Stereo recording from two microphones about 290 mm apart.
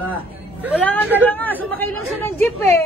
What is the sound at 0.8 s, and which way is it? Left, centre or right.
Speech, centre.